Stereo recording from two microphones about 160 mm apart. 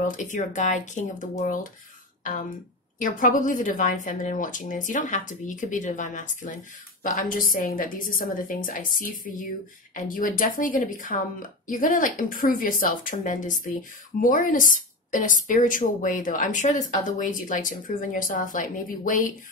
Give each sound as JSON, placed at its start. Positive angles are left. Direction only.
{"t": 0.1, "sound": "speech", "side_deg": 50}
{"t": 3.0, "sound": "a woman's voice", "side_deg": 55}